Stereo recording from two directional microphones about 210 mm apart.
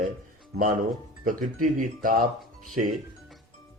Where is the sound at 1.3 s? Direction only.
40° right (ahead or behind).